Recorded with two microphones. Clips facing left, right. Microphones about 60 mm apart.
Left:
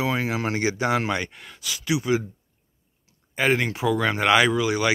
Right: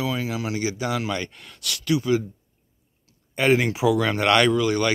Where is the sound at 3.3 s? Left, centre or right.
Centre.